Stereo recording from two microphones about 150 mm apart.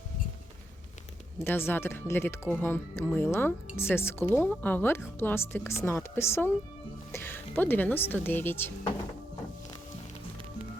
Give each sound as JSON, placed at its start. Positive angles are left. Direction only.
{"t": 1.5, "sound": "speech", "side_deg": 15}